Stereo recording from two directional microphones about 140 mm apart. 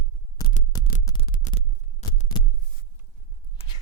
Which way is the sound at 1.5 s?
60° left (ahead or behind).